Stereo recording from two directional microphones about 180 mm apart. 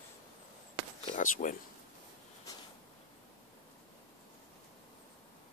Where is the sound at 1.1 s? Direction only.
45° left (ahead or behind).